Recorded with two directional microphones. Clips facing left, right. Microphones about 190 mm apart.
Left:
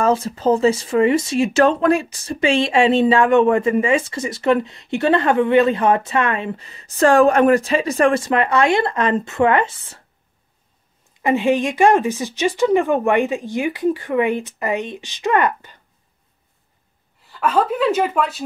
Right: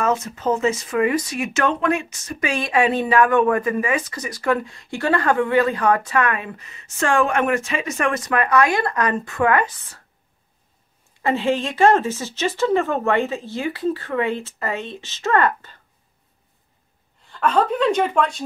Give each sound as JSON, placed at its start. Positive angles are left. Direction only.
{"t": 0.0, "sound": "speech", "side_deg": 30}
{"t": 11.2, "sound": "speech", "side_deg": 15}
{"t": 17.3, "sound": "speech", "side_deg": 5}